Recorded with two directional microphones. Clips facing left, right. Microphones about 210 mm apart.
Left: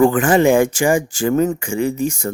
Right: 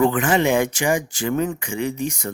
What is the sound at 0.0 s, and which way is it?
Speech, 50° left (ahead or behind).